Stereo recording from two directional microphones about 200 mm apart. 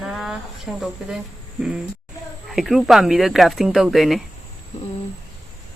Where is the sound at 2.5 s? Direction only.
Centre (ahead or behind).